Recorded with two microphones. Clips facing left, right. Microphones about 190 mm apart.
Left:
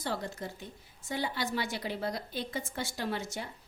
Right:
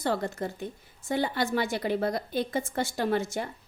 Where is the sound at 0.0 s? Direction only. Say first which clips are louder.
Right 7 dB; 55° right (ahead or behind).